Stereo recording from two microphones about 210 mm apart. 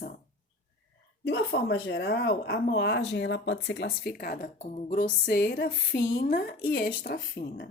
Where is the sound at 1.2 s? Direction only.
55° left (ahead or behind).